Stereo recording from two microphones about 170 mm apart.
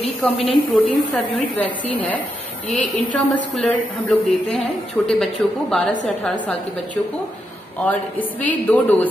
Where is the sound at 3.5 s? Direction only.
5° left (ahead or behind).